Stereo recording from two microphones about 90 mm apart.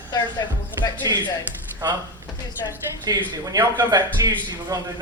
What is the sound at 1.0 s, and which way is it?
Speech, 40° right (ahead or behind).